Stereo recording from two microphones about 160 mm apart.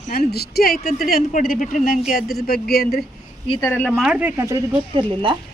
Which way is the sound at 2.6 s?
75° left (ahead or behind).